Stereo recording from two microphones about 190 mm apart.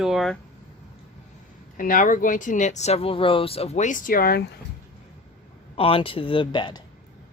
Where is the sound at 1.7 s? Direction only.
45° left (ahead or behind).